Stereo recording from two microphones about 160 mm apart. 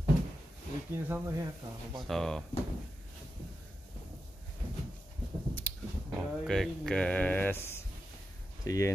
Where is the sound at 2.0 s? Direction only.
5° left (ahead or behind).